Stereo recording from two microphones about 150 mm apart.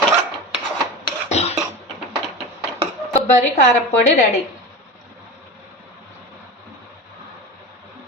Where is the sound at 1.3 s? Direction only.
45° left (ahead or behind).